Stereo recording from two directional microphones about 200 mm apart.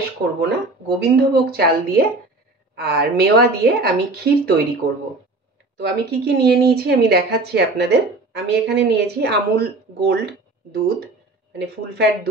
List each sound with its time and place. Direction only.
0.4 s a woman's voice: 55° right (ahead or behind)
5.8 s speech: 55° right (ahead or behind)
11.5 s speech: 55° right (ahead or behind)